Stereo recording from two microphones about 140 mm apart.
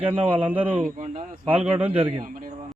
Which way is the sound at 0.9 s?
60° right (ahead or behind).